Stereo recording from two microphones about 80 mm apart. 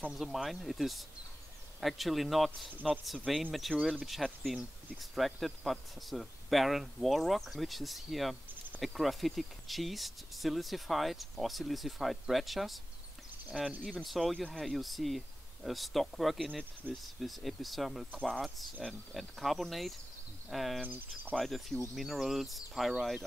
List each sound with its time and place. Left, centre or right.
0.1 s speech: centre
20.8 s speech: right
21.4 s speech: centre